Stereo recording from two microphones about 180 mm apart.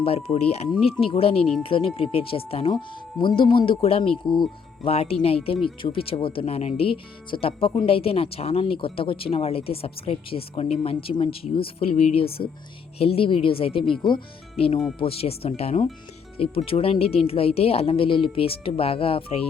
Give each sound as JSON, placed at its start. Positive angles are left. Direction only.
{"t": 0.0, "sound": "speech", "side_deg": 35}
{"t": 14.9, "sound": "speech", "side_deg": 30}